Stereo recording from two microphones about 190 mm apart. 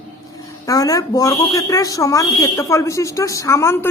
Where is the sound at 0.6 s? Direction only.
20° left (ahead or behind).